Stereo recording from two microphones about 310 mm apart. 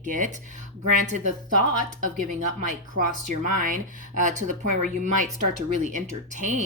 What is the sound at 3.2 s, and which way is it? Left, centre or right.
Speech, right.